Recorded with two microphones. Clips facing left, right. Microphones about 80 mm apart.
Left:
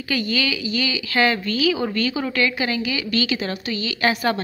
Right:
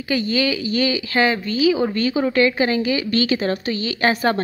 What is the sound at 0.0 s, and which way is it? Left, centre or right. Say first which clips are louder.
Speech: right 3 dB; right.